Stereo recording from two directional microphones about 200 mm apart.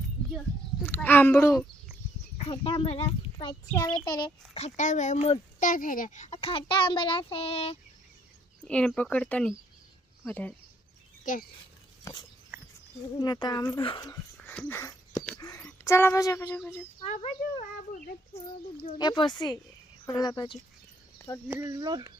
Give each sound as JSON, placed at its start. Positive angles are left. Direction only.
{"t": 0.9, "sound": "child singing", "side_deg": 10}
{"t": 2.5, "sound": "a child's voice", "side_deg": 25}
{"t": 8.6, "sound": "speech", "side_deg": 5}
{"t": 10.2, "sound": "child singing", "side_deg": 5}
{"t": 11.3, "sound": "speech", "side_deg": 40}
{"t": 13.1, "sound": "a child's voice", "side_deg": 20}
{"t": 14.3, "sound": "dog", "side_deg": 10}
{"t": 15.8, "sound": "child singing", "side_deg": 15}
{"t": 17.0, "sound": "a child's voice", "side_deg": 30}
{"t": 21.4, "sound": "speech", "side_deg": -10}